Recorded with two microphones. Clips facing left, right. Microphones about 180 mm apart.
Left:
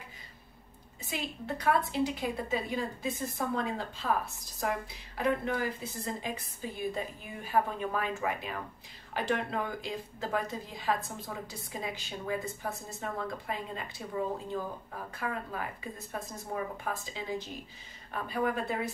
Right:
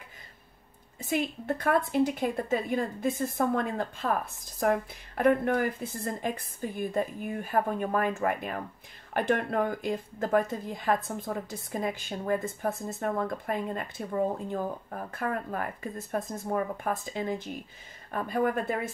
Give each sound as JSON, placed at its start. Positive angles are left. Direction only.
{"t": 1.0, "sound": "a woman's voice", "side_deg": -50}